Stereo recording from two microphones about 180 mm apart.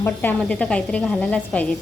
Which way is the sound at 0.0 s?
10° left (ahead or behind).